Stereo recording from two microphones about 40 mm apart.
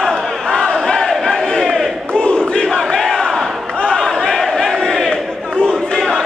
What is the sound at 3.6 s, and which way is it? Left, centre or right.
Battle cry, left.